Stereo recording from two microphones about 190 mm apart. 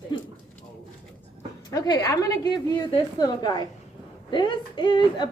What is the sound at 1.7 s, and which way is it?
A woman's voice, 20° left (ahead or behind).